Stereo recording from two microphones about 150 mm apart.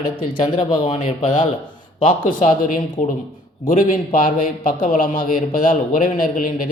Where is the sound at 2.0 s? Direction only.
60° left (ahead or behind).